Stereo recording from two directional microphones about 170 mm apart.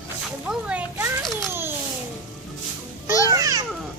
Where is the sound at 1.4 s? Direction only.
15° right (ahead or behind).